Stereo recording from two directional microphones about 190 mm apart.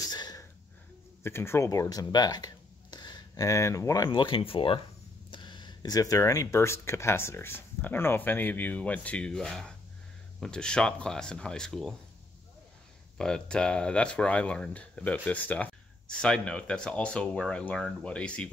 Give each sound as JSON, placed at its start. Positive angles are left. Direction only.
{"t": 0.0, "sound": "a sound", "side_deg": 20}
{"t": 1.2, "sound": "speech", "side_deg": 15}
{"t": 13.2, "sound": "speech", "side_deg": 5}